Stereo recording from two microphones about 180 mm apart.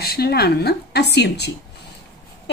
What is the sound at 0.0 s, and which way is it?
A woman's voice, 60° left (ahead or behind).